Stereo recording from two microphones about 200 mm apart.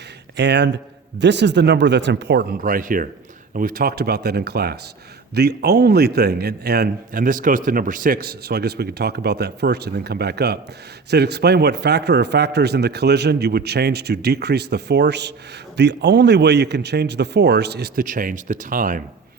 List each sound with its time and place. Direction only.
0.3 s a man's voice: 60° right (ahead or behind); by 19.0 s 45° right (ahead or behind)